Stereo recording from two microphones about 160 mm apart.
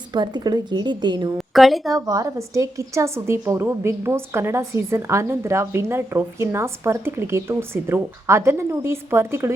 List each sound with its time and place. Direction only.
0.1 s a woman's voice: 25° right (ahead or behind)
1.5 s a woman's voice: centre (ahead or behind)
1.9 s a woman's voice: 20° right (ahead or behind)